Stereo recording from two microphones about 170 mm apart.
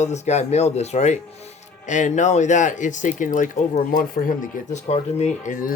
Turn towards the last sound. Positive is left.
turn(degrees=50)  # may be behind; listen again after turning